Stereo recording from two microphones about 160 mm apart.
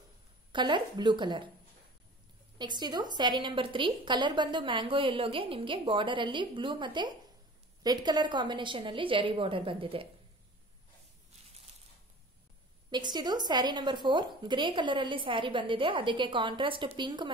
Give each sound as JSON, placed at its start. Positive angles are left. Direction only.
{"t": 0.5, "sound": "a woman's voice", "side_deg": -30}
{"t": 2.6, "sound": "a woman's voice", "side_deg": -25}
{"t": 12.9, "sound": "a woman's voice", "side_deg": -25}